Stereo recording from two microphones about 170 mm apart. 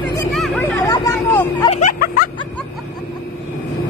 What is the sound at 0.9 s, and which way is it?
Vehicle, 25° left (ahead or behind).